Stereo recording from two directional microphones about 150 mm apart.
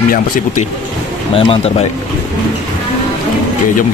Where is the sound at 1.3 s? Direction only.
40° left (ahead or behind).